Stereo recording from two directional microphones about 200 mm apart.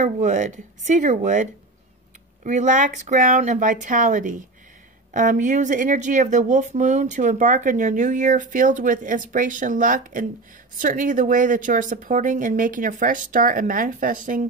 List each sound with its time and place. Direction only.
0.0 s speech: 35° right (ahead or behind)